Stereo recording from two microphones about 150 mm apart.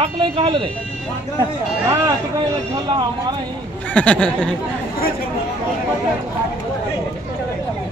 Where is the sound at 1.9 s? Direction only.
25° right (ahead or behind).